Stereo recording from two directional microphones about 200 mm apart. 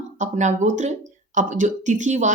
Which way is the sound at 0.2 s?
35° right (ahead or behind).